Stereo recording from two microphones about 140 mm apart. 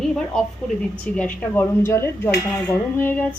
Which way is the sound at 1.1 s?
15° left (ahead or behind).